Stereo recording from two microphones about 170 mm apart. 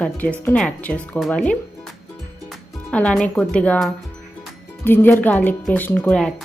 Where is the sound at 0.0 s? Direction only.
10° left (ahead or behind).